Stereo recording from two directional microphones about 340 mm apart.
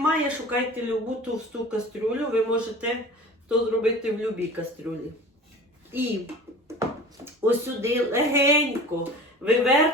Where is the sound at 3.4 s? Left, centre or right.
Centre.